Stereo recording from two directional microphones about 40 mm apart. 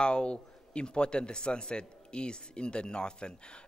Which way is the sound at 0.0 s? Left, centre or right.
Left.